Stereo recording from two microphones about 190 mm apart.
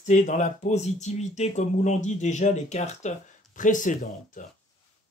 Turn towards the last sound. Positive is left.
turn(degrees=45)  # may be behind; listen again after turning